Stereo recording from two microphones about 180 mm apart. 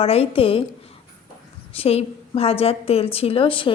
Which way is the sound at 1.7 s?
35° left (ahead or behind).